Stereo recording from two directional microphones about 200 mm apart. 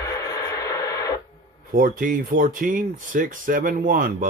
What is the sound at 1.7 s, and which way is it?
Speech, 45° right (ahead or behind).